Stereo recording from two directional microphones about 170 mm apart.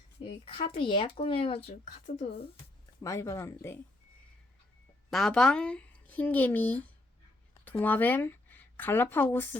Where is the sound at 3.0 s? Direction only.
20° left (ahead or behind).